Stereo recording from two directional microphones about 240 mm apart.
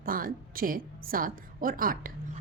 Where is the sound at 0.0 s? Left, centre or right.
Right.